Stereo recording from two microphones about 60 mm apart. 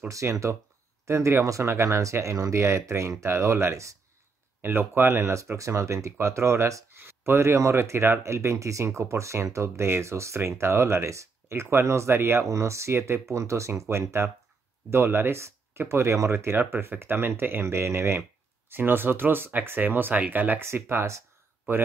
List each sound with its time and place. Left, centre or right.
0.1 s speech: right
4.6 s speech: right
5.3 s speech: right
7.0 s speech: right
16.5 s speech: right
18.7 s speech: right
20.6 s speech: right